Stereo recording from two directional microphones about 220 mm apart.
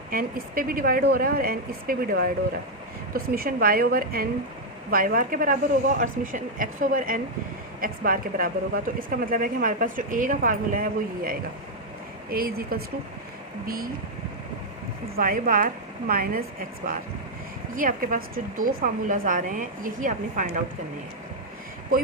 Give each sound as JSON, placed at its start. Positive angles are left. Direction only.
{"t": 0.1, "sound": "speech", "side_deg": -40}
{"t": 15.1, "sound": "speech", "side_deg": -40}